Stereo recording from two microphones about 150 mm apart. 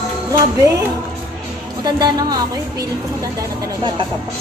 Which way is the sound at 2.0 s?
25° right (ahead or behind).